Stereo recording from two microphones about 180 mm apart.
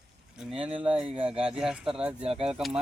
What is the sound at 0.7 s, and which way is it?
Speech, 30° right (ahead or behind).